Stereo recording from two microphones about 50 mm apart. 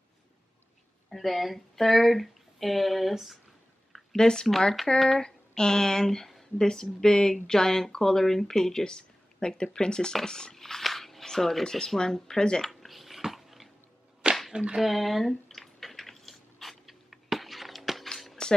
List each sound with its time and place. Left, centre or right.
1.1 s speech: centre
4.2 s speech: centre
12.8 s dog: centre
14.5 s whip: centre
14.8 s a sound: centre